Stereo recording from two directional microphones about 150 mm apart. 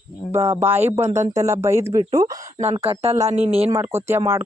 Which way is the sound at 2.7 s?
40° right (ahead or behind).